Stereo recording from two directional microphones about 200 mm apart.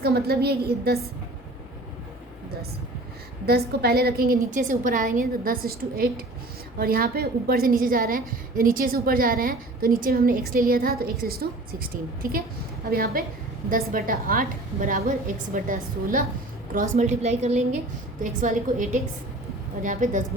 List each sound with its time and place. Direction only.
0.0 s a woman's voice: 50° right (ahead or behind)
3.4 s a woman's voice: 50° right (ahead or behind)